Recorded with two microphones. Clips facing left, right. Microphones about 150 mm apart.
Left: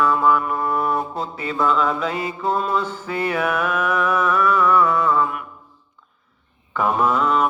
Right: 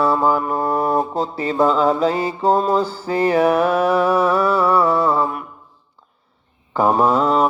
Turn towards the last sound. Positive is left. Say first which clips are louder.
# right 3 dB
turn(degrees=-35)  # may be behind; listen again after turning